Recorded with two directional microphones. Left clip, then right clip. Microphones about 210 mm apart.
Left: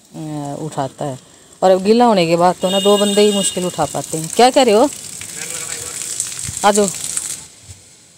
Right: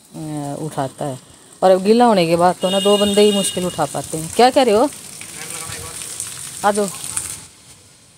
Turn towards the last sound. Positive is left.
turn(degrees=25)  # may be behind; listen again after turning